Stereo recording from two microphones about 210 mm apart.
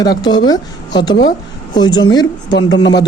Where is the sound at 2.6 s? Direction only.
75° left (ahead or behind).